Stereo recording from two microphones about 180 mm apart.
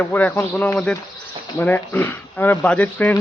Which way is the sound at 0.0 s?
10° left (ahead or behind).